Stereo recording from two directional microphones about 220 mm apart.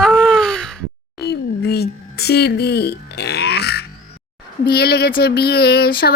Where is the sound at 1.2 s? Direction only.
45° left (ahead or behind).